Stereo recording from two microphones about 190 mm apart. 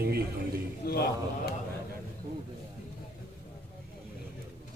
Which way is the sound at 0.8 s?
55° left (ahead or behind).